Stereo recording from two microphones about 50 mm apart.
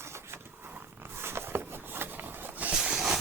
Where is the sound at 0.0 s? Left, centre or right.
Right.